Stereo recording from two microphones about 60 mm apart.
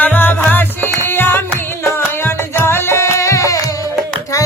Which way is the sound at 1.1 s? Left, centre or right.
Left.